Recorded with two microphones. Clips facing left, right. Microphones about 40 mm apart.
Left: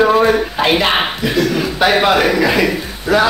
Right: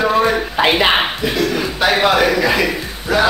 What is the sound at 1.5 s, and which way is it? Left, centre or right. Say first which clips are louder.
A man's voice: left 2 dB; centre.